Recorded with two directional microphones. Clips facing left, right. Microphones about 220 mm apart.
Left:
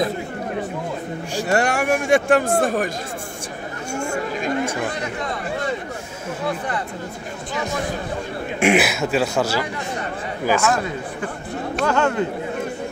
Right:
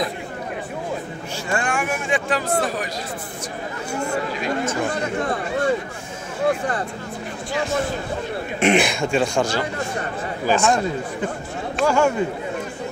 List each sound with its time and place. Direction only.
1.5 s speech: 65° left (ahead or behind)
2.0 s speech: 45° left (ahead or behind)
3.9 s speech: 45° left (ahead or behind)
8.5 s speech: 5° left (ahead or behind)
11.8 s speech: 10° right (ahead or behind)